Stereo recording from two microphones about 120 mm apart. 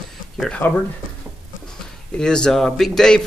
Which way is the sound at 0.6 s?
15° left (ahead or behind).